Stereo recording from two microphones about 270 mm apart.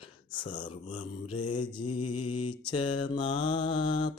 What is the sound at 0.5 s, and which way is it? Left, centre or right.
Mantra, left.